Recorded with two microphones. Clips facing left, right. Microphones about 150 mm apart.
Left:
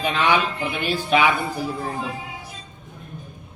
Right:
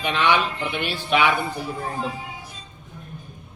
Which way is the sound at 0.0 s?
40° left (ahead or behind).